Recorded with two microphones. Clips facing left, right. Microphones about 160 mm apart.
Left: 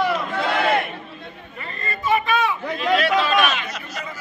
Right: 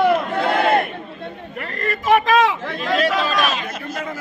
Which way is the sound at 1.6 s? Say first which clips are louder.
Right 5 dB; 85° right.